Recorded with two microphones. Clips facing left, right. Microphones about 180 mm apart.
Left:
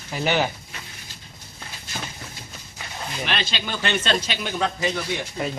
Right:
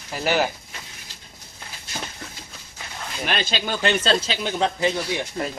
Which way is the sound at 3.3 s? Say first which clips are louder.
Right 4 dB; 45° right (ahead or behind).